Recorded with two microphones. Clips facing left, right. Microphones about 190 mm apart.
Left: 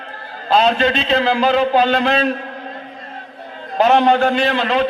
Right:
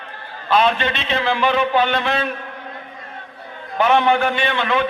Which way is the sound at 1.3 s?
40° left (ahead or behind).